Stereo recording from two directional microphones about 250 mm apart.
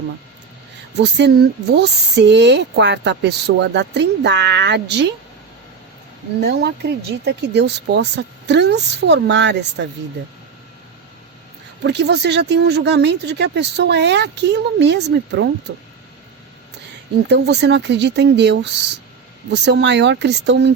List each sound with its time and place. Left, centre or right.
0.9 s speech: right
6.4 s speech: right
11.8 s speech: right
17.2 s speech: right